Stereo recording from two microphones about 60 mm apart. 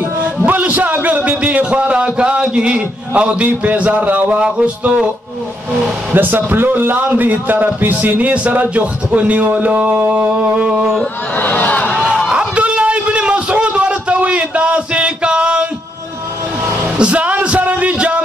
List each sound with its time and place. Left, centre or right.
0.2 s a sound: right
2.4 s a man's voice: centre
6.1 s a man's voice: right; by 11.1 s centre
11.3 s speech: left
12.3 s a sound: centre
17.0 s a man's voice: right